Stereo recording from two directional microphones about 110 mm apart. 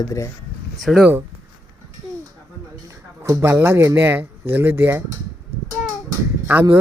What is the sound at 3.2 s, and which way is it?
Speech, 25° right (ahead or behind).